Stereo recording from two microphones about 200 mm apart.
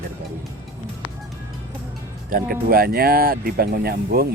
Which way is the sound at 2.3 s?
45° right (ahead or behind).